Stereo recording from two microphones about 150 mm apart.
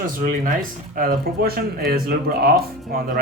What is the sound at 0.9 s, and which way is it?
Speech, 75° right (ahead or behind).